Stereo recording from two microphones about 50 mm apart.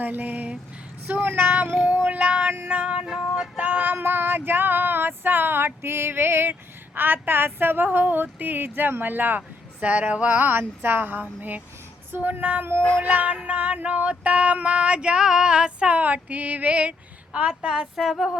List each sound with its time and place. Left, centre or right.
0.0 s speech: right
2.8 s female singing: right
3.1 s a sound: centre
3.6 s speech: right
3.9 s a sound: right
9.8 s female singing: right
10.6 s speech: right
13.4 s female singing: right
16.0 s speech: right
17.9 s a woman's voice: centre